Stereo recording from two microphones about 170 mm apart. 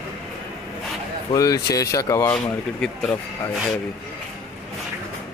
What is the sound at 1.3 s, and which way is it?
A man's voice, 20° left (ahead or behind).